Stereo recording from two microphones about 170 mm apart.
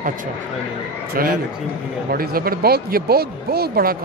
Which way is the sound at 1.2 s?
60° right (ahead or behind).